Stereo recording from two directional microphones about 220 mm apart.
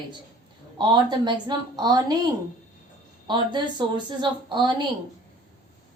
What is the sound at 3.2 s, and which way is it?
A woman's voice, 20° right (ahead or behind).